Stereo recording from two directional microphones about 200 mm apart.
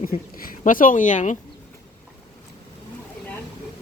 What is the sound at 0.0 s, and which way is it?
Speech, 45° left (ahead or behind).